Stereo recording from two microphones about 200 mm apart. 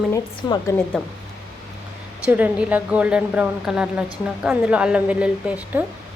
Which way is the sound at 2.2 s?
5° right (ahead or behind).